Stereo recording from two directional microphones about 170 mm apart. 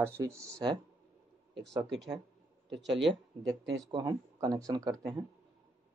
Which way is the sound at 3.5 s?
20° right (ahead or behind).